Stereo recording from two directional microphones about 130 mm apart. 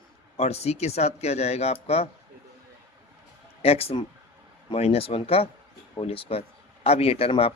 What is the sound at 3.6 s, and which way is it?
Speech, 50° left (ahead or behind).